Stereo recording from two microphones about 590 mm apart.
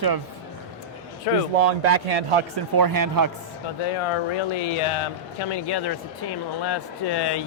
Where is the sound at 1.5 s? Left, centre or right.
Right.